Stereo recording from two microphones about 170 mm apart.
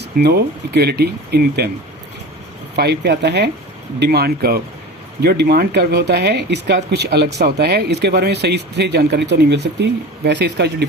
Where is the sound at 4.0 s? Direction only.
70° right (ahead or behind).